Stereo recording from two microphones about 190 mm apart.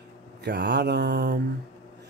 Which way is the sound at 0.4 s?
65° right (ahead or behind).